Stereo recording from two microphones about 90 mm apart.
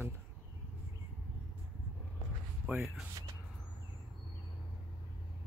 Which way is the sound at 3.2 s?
45° right (ahead or behind).